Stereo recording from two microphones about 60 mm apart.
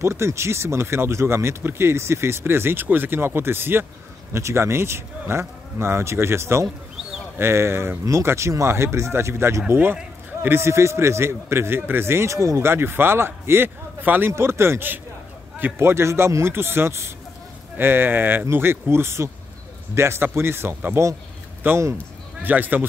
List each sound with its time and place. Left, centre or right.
0.0 s speech: right
4.3 s speech: right
14.3 s speech: right